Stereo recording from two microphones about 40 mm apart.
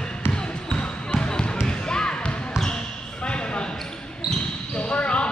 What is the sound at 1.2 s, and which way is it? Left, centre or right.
Basketball bounce, left.